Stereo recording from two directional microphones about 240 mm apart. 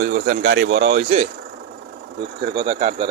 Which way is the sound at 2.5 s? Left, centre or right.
Right.